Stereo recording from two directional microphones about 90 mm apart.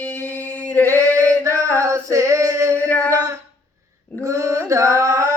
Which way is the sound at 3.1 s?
40° right (ahead or behind).